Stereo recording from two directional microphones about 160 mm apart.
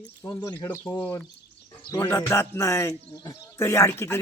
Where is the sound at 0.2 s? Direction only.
15° left (ahead or behind).